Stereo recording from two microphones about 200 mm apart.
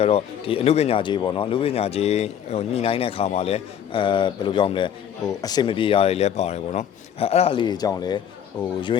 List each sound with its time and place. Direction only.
0.0 s speech: 30° left (ahead or behind)